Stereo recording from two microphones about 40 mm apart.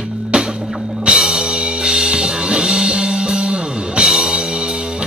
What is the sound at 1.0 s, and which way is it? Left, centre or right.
Music, centre.